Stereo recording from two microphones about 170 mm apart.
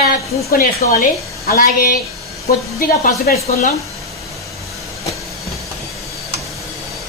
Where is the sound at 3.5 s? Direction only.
40° left (ahead or behind).